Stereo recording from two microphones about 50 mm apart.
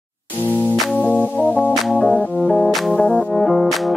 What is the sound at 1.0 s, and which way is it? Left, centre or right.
Music, left.